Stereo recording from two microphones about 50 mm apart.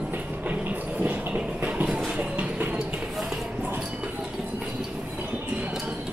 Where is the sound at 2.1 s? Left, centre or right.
Right.